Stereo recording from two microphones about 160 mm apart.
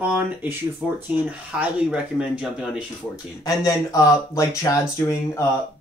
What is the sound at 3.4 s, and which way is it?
Speech, 20° left (ahead or behind).